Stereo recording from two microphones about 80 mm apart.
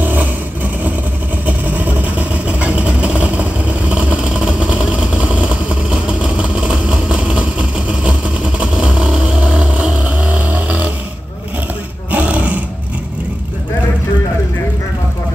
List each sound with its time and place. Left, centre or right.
0.0 s vehicle: right
1.4 s vehicle: right
12.1 s roar: centre